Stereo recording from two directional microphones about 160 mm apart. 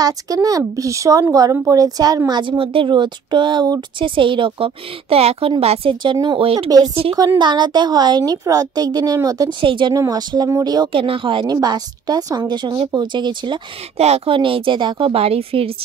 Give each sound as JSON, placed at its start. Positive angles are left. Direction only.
{"t": 0.0, "sound": "a woman's voice", "side_deg": -25}